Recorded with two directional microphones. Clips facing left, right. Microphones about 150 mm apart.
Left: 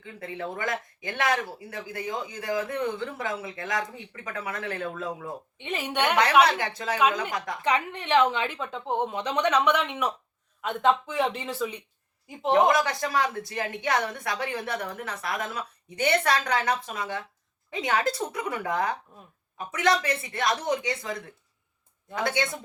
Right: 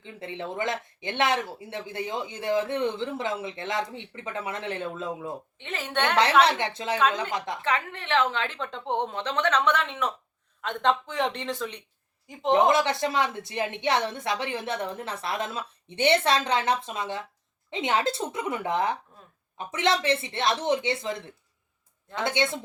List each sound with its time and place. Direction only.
0.0 s speech: 25° right (ahead or behind)
5.5 s a woman's voice: 15° left (ahead or behind)
6.4 s speech: 25° right (ahead or behind)
7.6 s a woman's voice: 15° left (ahead or behind)
12.5 s speech: 25° right (ahead or behind)